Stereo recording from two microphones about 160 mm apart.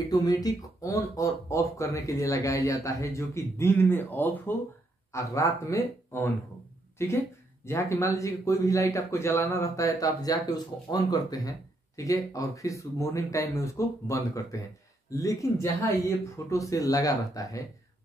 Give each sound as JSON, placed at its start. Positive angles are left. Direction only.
{"t": 0.1, "sound": "speech", "side_deg": 25}